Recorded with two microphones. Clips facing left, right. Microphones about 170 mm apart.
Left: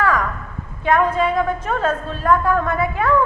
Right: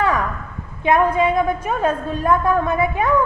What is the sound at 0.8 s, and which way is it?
A woman's voice, 15° right (ahead or behind).